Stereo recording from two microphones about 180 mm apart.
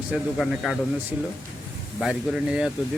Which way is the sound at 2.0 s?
5° right (ahead or behind).